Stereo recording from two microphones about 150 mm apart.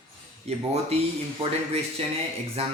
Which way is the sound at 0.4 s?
40° right (ahead or behind).